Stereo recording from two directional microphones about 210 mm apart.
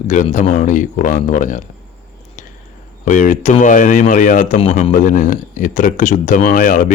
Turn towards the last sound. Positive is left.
turn(degrees=40)  # may be behind; listen again after turning